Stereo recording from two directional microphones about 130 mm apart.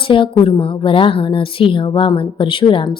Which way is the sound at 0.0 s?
40° left (ahead or behind).